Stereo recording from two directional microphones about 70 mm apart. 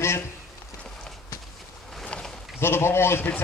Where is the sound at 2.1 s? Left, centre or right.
Centre.